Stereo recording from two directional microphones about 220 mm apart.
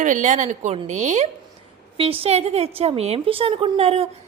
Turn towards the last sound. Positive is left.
turn(degrees=-25)  # may be behind; listen again after turning